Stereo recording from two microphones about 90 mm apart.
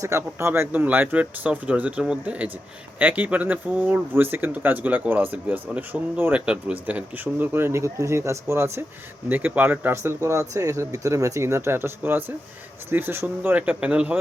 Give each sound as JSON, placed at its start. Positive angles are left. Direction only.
{"t": 0.0, "sound": "speech", "side_deg": -30}